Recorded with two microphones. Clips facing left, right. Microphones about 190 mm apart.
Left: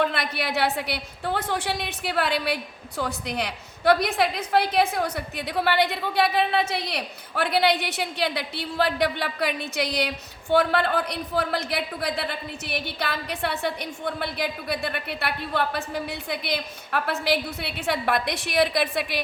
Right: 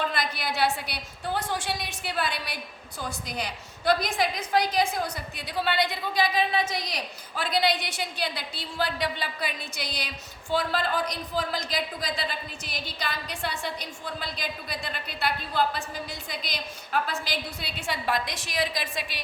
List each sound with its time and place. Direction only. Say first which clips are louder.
0.0 s a woman's voice: left 4 dB; 60° left (ahead or behind)